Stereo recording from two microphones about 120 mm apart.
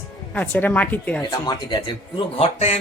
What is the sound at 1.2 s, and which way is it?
Speech, 35° left (ahead or behind).